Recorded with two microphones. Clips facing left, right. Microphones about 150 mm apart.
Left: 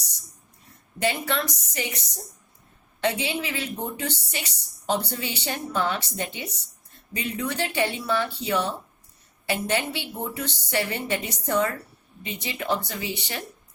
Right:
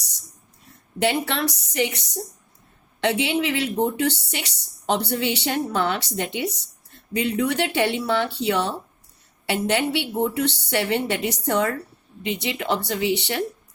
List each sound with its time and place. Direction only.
0.9 s a woman's voice: 65° right (ahead or behind)
9.5 s a woman's voice: 70° right (ahead or behind)